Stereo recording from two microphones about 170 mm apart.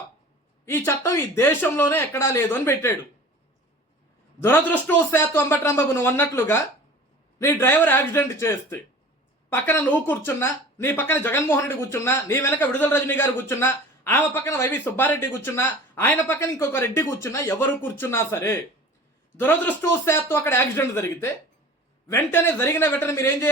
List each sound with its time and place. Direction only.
0.6 s speech: 15° left (ahead or behind)
4.4 s speech: 10° left (ahead or behind)